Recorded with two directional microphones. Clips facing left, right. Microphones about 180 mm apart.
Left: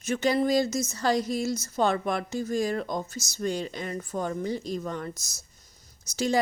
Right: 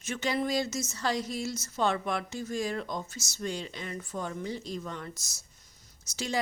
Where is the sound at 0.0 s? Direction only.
40° left (ahead or behind).